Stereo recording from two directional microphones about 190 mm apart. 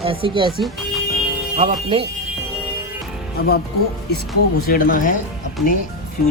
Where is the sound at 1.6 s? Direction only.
30° right (ahead or behind).